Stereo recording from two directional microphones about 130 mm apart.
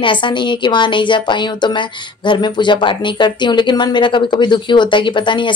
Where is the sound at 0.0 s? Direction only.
40° left (ahead or behind).